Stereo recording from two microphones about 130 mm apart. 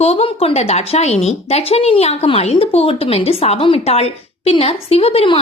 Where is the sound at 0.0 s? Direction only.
50° left (ahead or behind).